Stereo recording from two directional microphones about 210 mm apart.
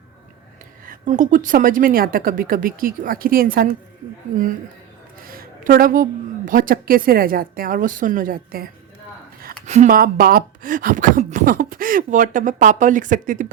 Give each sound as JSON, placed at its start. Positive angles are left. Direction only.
{"t": 0.9, "sound": "speech", "side_deg": -40}
{"t": 5.2, "sound": "a woman's voice", "side_deg": -45}